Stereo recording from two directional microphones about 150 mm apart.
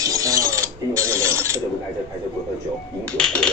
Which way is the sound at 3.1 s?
5° left (ahead or behind).